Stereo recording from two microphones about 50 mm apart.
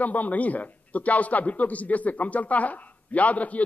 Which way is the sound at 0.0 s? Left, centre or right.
Left.